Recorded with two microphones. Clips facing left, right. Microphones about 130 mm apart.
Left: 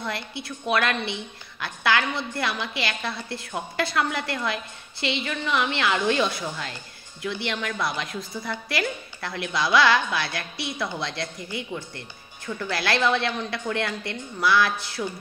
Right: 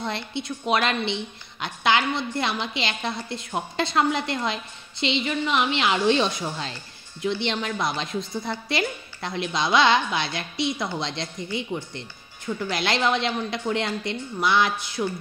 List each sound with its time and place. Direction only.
0.0 s a woman's voice: 25° right (ahead or behind)